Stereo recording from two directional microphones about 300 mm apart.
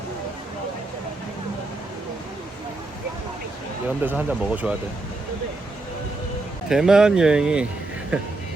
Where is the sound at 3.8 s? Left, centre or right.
Centre.